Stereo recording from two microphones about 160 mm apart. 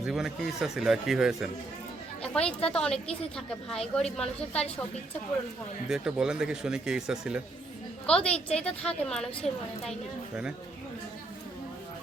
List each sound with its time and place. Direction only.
0.0 s a woman's voice: 5° right (ahead or behind)
5.9 s a woman's voice: 5° right (ahead or behind)
8.0 s a woman's voice: 5° left (ahead or behind)